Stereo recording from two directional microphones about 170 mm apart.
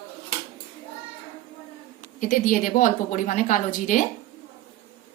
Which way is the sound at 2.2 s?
50° left (ahead or behind).